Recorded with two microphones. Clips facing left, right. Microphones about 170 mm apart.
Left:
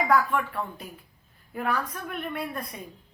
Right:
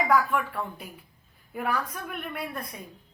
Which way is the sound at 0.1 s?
5° right (ahead or behind).